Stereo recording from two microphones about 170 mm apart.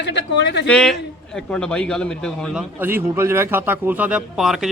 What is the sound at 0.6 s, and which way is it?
A man's voice, 5° left (ahead or behind).